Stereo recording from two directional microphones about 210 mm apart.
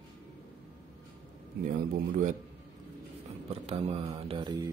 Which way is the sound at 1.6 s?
40° right (ahead or behind).